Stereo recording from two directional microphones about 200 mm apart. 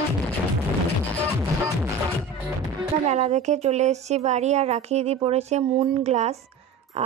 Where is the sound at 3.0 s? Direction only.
35° right (ahead or behind).